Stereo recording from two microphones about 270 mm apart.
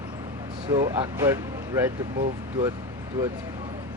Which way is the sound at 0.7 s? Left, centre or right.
Centre.